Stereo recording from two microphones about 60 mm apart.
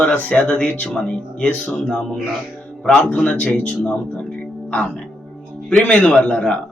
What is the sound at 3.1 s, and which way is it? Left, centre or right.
Speech, centre.